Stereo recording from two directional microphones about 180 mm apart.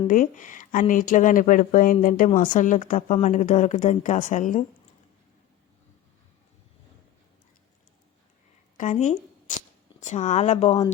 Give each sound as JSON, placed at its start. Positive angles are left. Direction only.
{"t": 0.1, "sound": "speech", "side_deg": 45}
{"t": 8.8, "sound": "speech", "side_deg": 45}